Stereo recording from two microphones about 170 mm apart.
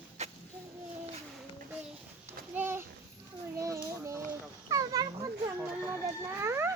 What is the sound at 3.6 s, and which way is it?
Children playing, 20° right (ahead or behind).